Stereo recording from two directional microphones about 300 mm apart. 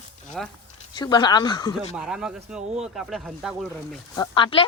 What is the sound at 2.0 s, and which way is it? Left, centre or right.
Speech, centre.